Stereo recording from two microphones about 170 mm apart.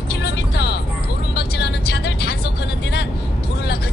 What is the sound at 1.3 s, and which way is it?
Vehicle, 75° left (ahead or behind).